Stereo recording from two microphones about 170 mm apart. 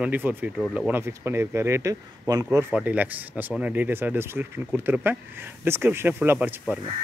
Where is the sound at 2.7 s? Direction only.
10° right (ahead or behind).